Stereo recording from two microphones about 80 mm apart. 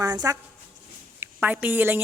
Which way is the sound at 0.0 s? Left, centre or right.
Right.